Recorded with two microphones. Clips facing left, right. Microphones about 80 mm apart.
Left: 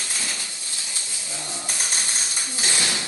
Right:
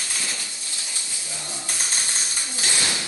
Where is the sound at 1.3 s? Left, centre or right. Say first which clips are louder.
Left 2 dB; left.